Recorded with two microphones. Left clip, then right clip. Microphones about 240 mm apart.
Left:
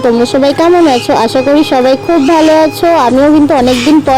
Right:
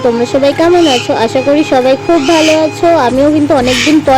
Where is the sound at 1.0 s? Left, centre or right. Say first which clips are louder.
Left 2 dB; left.